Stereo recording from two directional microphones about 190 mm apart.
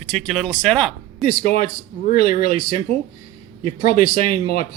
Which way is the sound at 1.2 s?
50° left (ahead or behind).